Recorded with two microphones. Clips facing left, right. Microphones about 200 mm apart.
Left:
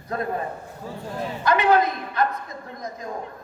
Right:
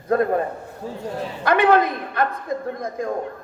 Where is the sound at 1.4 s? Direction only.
55° right (ahead or behind).